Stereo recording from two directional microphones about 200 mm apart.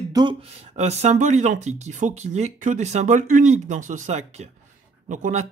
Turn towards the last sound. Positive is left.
turn(degrees=-35)  # may be behind; listen again after turning